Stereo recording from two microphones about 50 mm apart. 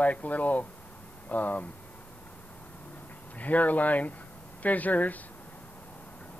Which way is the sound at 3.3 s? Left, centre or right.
Left.